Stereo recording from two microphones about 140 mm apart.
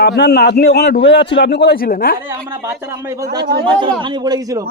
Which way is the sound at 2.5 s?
15° right (ahead or behind).